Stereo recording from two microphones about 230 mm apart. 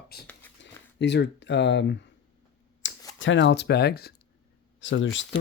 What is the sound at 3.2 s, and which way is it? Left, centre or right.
Speech, left.